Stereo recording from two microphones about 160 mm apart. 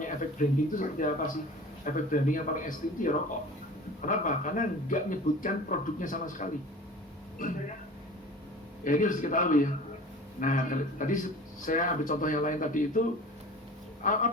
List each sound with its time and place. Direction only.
0.0 s speech: 55° left (ahead or behind)
8.8 s speech: 55° left (ahead or behind)